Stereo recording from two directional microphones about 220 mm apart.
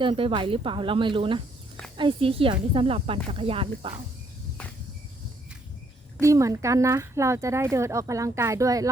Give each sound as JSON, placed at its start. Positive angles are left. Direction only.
{"t": 0.0, "sound": "speech", "side_deg": -25}
{"t": 6.1, "sound": "speech", "side_deg": -15}